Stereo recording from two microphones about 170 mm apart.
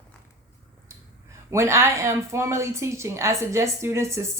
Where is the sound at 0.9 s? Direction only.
15° right (ahead or behind).